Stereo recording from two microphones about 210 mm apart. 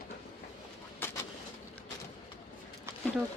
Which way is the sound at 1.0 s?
10° left (ahead or behind).